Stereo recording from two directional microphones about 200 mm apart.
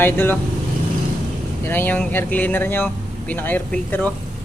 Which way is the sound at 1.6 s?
10° left (ahead or behind).